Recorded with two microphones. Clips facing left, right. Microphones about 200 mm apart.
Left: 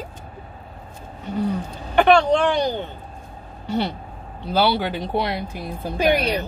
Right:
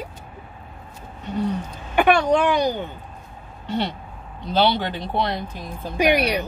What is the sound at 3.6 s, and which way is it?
Speech, 10° left (ahead or behind).